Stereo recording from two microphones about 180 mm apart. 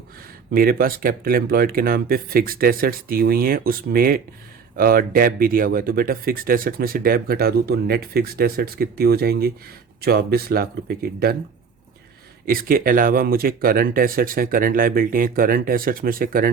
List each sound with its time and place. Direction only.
0.5 s speech: 55° right (ahead or behind)
12.5 s speech: 55° right (ahead or behind)